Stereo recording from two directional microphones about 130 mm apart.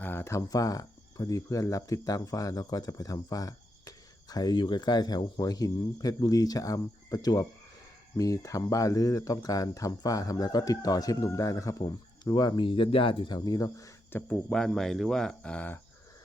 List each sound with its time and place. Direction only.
0.0 s speech: 20° left (ahead or behind)
14.5 s speech: 5° left (ahead or behind)